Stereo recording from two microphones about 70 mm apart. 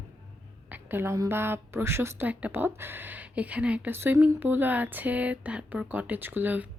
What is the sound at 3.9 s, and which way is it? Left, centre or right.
A woman's voice, right.